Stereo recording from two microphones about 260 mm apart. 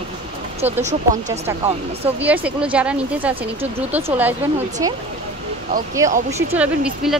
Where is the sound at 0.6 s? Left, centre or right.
Right.